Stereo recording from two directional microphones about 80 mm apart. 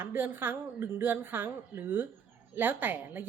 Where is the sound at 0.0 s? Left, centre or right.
Right.